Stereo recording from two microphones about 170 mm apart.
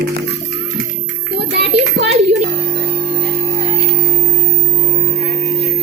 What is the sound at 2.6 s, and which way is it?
Music, 45° right (ahead or behind).